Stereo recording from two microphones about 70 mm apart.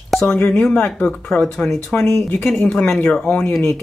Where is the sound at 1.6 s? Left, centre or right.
Centre.